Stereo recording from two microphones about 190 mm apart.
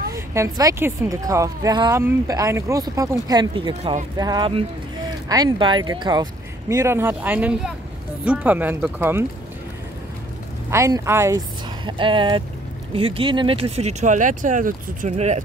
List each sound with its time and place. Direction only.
0.1 s speech: 15° right (ahead or behind)
10.7 s speech: 15° right (ahead or behind); by 15.4 s 35° right (ahead or behind)